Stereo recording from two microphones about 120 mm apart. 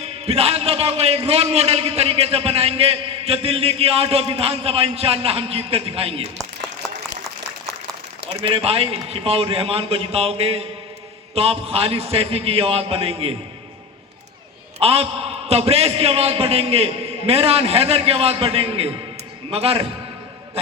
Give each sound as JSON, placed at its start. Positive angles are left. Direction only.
{"t": 0.0, "sound": "a man's voice", "side_deg": -60}
{"t": 8.4, "sound": "a man's voice", "side_deg": -50}
{"t": 14.8, "sound": "a man's voice", "side_deg": -55}